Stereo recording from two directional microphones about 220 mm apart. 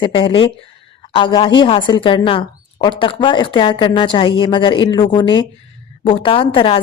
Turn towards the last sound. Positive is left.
turn(degrees=25)  # may be behind; listen again after turning